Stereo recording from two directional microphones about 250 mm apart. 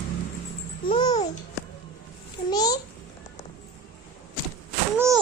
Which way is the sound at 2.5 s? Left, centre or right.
Centre.